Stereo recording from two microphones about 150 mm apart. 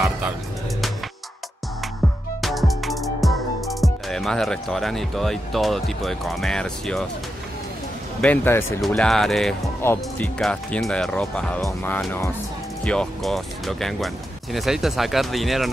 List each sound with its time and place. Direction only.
2.4 s music: centre (ahead or behind)
8.2 s speech: 10° left (ahead or behind)
8.8 s speech: 5° left (ahead or behind)
9.8 s speech: 15° left (ahead or behind)